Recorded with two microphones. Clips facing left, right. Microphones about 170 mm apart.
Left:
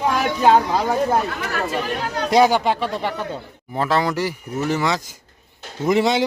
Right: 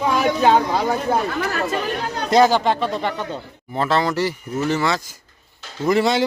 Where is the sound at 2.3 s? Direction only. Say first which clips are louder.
Right 1 dB; 10° left (ahead or behind).